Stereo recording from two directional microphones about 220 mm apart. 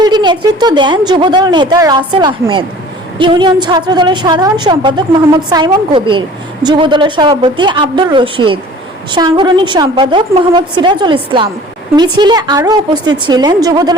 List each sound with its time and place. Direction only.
0.0 s a woman's voice: 20° right (ahead or behind)